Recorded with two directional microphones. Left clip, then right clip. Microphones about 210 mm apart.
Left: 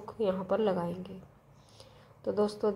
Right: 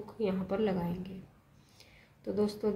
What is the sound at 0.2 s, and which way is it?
Speech, 20° left (ahead or behind).